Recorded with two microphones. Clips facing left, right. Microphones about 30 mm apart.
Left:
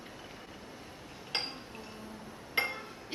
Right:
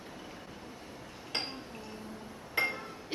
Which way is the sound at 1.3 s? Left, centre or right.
Left.